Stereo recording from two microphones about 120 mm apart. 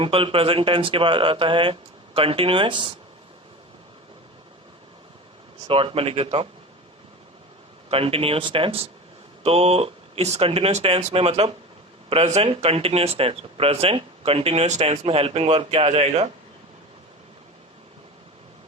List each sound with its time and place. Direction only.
0.0 s speech: 50° right (ahead or behind)
5.6 s speech: 50° right (ahead or behind)
7.9 s speech: 50° right (ahead or behind)